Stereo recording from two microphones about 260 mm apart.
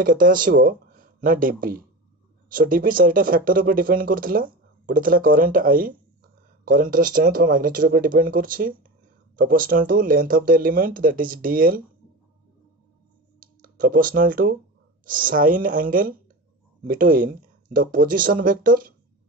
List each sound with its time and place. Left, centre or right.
0.0 s speech: right
13.4 s speech: right